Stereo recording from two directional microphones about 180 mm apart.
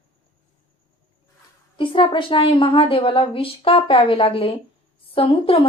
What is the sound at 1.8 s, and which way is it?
Speech, 30° left (ahead or behind).